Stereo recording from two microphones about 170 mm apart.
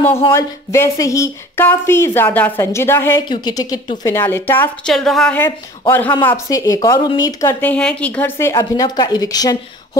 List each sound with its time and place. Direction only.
0.3 s speech: 15° left (ahead or behind)
3.2 s a woman's voice: 25° left (ahead or behind)